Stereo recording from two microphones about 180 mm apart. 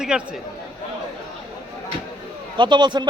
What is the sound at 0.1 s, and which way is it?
Speech, 5° right (ahead or behind).